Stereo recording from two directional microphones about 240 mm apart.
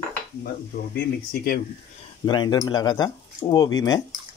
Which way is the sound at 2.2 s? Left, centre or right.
Centre.